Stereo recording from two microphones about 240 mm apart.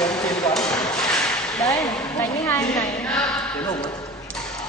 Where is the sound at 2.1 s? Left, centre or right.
Centre.